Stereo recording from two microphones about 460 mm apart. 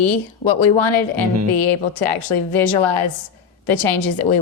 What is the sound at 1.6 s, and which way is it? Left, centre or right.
Speech, left.